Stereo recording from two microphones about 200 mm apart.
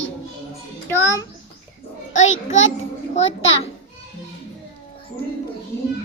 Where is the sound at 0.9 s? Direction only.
10° left (ahead or behind).